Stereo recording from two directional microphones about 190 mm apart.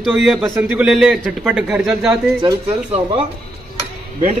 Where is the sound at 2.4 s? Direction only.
25° right (ahead or behind).